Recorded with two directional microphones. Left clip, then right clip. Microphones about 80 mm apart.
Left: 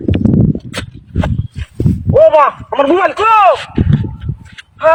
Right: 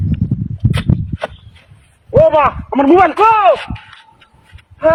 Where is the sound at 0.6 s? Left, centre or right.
Left.